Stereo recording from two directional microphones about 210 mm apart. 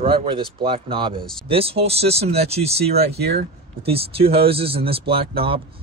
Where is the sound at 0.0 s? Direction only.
25° right (ahead or behind).